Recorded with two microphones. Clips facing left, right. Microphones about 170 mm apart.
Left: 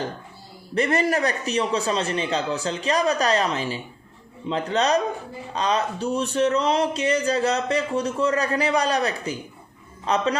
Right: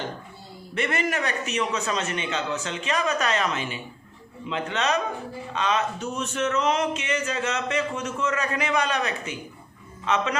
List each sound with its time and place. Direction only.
0.7 s speech: 35° left (ahead or behind)